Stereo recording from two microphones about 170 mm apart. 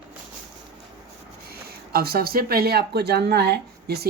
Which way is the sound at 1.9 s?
65° right (ahead or behind).